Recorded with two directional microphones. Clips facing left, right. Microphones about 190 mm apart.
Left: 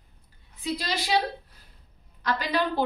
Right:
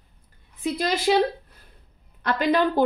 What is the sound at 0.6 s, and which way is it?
Speech, 50° right (ahead or behind).